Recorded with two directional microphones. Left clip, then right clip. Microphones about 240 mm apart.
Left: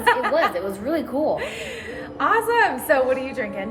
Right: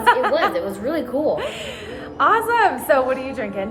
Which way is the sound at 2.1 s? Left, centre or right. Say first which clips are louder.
Right 2 dB; centre.